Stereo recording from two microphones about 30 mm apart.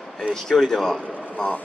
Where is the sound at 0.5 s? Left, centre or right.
Centre.